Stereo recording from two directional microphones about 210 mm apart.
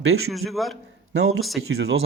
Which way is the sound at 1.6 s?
70° right (ahead or behind).